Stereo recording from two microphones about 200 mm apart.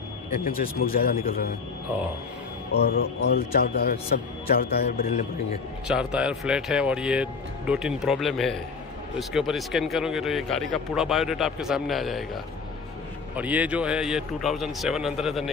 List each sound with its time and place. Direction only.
0.5 s a man's voice: 45° left (ahead or behind)
2.9 s a man's voice: 55° left (ahead or behind)
5.9 s speech: 5° right (ahead or behind)
13.4 s speech: 5° right (ahead or behind)